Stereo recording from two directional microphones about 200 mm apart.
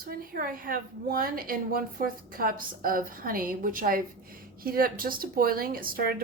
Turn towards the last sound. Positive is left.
turn(degrees=-45)  # may be behind; listen again after turning